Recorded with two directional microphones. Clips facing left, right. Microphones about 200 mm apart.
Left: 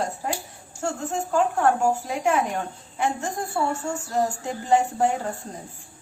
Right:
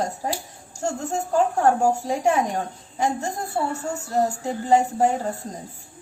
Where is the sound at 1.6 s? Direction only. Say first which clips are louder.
Right 2 dB; 40° right (ahead or behind).